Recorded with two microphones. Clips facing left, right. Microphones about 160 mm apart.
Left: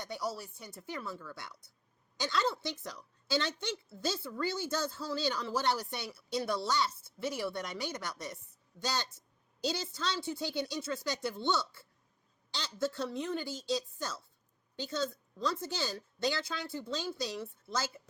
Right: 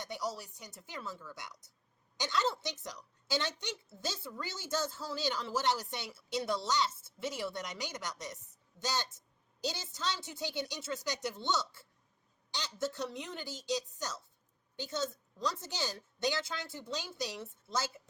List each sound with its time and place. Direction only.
0.3 s a woman's voice: 20° right (ahead or behind)